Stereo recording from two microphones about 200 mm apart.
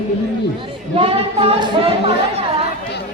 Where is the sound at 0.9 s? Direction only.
30° right (ahead or behind).